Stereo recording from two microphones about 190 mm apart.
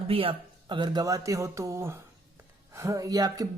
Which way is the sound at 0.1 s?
30° right (ahead or behind).